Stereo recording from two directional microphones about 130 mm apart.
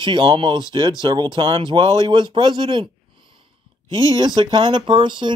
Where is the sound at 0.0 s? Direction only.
40° right (ahead or behind).